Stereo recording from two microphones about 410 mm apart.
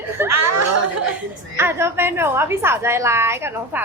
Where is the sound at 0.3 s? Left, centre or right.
Right.